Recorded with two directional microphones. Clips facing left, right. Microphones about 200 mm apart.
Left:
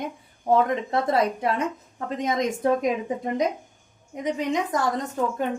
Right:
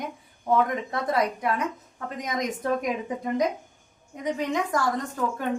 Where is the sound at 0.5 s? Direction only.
30° left (ahead or behind).